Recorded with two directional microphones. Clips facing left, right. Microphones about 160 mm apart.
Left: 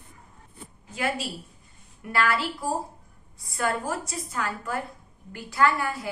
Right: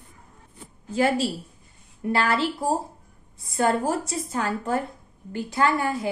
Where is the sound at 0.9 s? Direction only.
30° right (ahead or behind).